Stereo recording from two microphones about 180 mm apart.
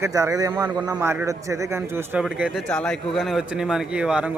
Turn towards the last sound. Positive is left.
turn(degrees=-5)  # may be behind; listen again after turning